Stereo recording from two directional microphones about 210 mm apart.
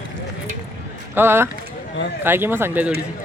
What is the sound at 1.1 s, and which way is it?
Speech, 10° right (ahead or behind).